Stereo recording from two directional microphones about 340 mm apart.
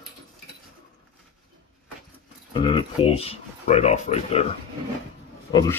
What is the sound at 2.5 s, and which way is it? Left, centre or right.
Speech, centre.